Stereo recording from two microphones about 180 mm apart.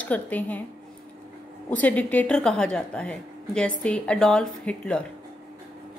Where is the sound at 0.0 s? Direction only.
10° left (ahead or behind).